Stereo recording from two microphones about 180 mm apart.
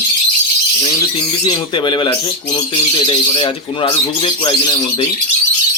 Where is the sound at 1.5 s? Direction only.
25° left (ahead or behind).